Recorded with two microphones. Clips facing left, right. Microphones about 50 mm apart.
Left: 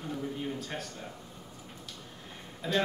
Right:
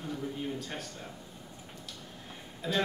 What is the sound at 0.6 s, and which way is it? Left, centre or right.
Speech, centre.